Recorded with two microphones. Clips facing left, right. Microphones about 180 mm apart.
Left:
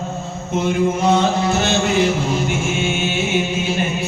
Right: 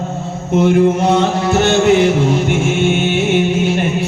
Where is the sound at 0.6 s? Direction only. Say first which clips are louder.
Right 6 dB; 60° right (ahead or behind).